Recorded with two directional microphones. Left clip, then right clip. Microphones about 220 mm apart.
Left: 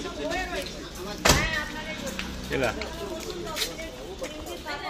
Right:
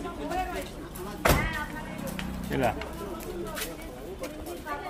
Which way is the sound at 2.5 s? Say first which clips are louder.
Left 1 dB; 50° right (ahead or behind).